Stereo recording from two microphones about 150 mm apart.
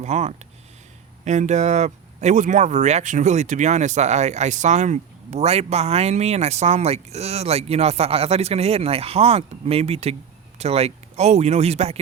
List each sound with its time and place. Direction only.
0.0 s speech: 45° right (ahead or behind)